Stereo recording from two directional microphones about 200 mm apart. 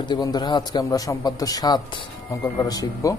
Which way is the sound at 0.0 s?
20° left (ahead or behind).